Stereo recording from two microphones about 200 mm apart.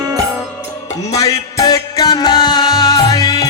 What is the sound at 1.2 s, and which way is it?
Music, 20° left (ahead or behind).